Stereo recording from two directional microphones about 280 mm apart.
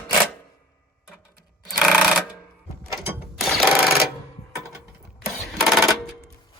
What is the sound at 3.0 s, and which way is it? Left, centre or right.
Mechanisms, centre.